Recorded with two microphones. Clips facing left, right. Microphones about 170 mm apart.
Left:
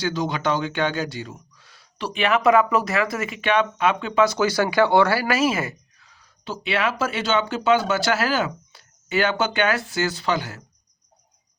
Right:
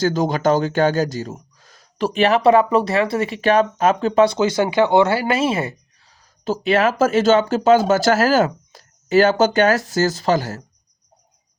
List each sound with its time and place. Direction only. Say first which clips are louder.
0.0 s a man's voice: right 6 dB; 45° right (ahead or behind)